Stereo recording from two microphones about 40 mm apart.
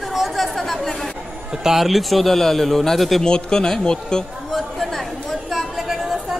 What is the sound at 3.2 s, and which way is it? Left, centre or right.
A man's voice, centre.